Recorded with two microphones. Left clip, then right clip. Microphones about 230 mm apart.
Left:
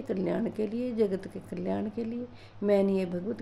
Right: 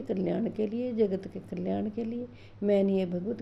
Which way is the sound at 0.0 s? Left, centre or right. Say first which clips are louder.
Even; centre.